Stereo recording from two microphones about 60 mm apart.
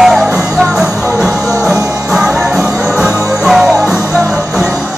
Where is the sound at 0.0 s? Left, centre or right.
Centre.